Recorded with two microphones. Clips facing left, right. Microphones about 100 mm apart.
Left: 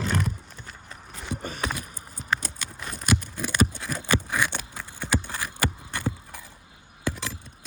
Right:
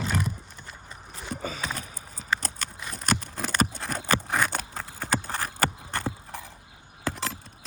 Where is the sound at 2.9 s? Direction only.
40° right (ahead or behind).